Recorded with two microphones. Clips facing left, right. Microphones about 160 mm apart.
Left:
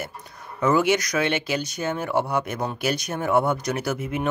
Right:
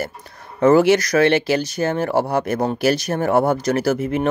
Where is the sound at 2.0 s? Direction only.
35° right (ahead or behind).